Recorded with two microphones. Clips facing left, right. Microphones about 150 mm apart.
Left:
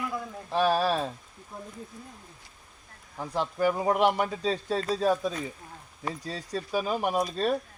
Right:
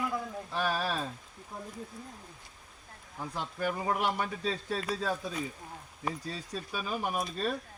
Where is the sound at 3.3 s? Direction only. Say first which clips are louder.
Left 8 dB; 85° left.